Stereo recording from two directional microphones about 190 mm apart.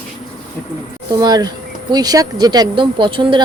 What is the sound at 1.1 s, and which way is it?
Speech, 20° right (ahead or behind).